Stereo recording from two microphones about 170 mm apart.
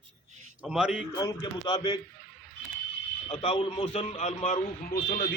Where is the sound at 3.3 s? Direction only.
35° left (ahead or behind).